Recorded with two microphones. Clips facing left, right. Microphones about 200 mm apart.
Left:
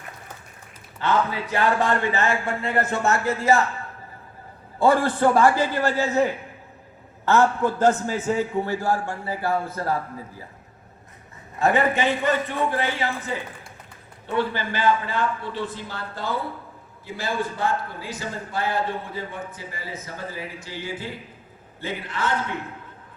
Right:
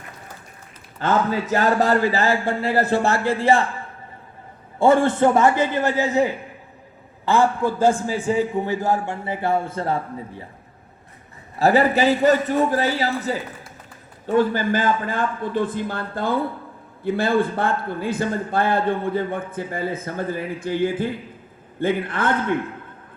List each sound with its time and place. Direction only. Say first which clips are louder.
0.9 s a man's voice: right 3 dB; 45° right (ahead or behind)
4.8 s a man's voice: right 3 dB; 25° right (ahead or behind)
11.6 s a man's voice: right 4 dB; 35° right (ahead or behind); by 22.6 s 55° right (ahead or behind)